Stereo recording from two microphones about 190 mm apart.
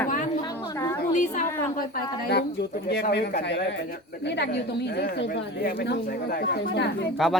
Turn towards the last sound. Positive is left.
turn(degrees=0)  # may be behind; listen again after turning